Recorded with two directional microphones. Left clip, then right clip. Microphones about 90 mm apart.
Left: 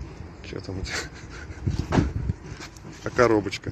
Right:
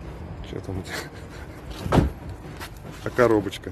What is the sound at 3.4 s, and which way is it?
Speech, 15° right (ahead or behind).